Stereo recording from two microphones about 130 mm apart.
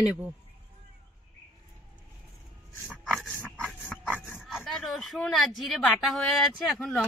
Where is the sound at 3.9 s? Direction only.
5° right (ahead or behind).